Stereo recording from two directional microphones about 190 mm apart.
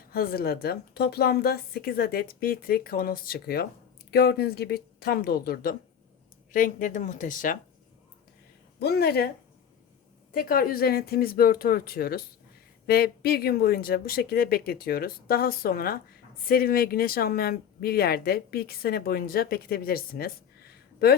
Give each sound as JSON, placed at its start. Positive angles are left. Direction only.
{"t": 0.1, "sound": "speech", "side_deg": 50}
{"t": 8.8, "sound": "speech", "side_deg": 55}
{"t": 10.3, "sound": "speech", "side_deg": 50}